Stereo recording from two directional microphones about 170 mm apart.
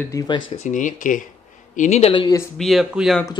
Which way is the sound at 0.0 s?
20° left (ahead or behind).